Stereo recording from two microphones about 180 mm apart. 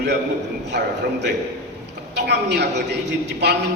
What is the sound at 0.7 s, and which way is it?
Speech, 65° right (ahead or behind).